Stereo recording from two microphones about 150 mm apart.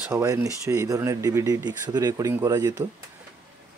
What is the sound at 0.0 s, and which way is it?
Speech, 20° right (ahead or behind).